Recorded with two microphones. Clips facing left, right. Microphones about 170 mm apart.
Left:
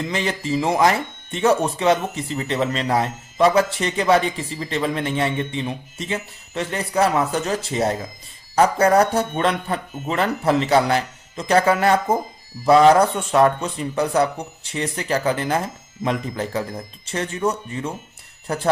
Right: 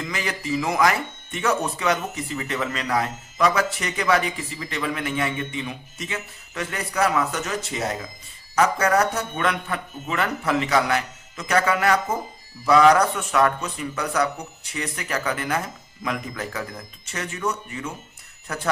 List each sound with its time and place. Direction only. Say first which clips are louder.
0.0 s speech: left 5 dB; 30° left (ahead or behind)